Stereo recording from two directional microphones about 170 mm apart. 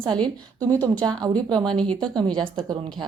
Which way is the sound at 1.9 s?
30° right (ahead or behind).